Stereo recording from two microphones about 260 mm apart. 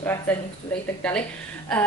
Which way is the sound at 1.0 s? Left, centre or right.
Centre.